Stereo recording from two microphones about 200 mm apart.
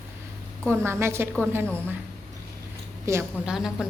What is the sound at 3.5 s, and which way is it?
Speech, centre (ahead or behind).